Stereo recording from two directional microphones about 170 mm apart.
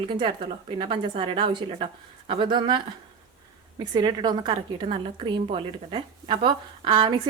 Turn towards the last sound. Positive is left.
turn(degrees=-30)  # may be behind; listen again after turning